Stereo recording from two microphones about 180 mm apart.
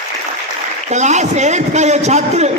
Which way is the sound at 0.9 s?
40° right (ahead or behind).